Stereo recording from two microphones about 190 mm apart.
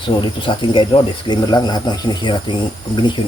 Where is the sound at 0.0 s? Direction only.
25° left (ahead or behind).